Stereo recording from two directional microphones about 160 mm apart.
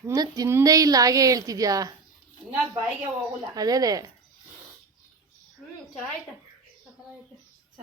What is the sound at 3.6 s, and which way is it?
Speech, 25° right (ahead or behind).